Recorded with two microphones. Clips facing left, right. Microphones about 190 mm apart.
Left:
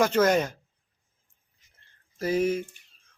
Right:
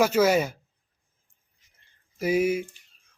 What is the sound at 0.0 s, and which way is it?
Speech, 10° right (ahead or behind).